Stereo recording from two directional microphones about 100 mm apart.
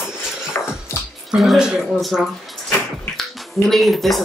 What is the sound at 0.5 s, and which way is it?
Music, 25° left (ahead or behind).